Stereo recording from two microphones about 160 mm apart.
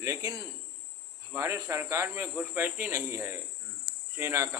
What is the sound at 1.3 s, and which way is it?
Speech, 15° right (ahead or behind).